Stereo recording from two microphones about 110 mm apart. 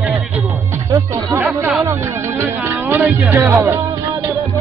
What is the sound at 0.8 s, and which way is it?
Speech, 25° right (ahead or behind).